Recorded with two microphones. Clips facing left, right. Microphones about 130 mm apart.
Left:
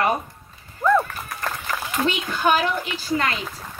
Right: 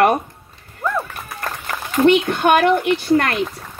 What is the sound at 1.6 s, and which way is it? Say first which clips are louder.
A woman's voice: right 10 dB; 60° right (ahead or behind).